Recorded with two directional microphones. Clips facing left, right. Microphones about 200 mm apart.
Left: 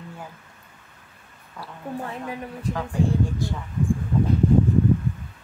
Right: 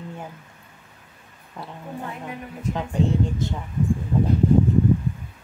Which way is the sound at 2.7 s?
20° right (ahead or behind).